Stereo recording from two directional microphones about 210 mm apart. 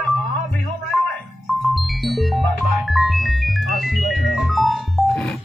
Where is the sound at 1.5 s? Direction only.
Centre (ahead or behind).